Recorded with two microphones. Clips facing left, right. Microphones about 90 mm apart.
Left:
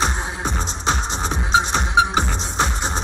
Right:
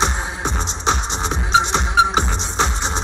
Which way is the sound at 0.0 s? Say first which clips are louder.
Right 1 dB; 20° right (ahead or behind).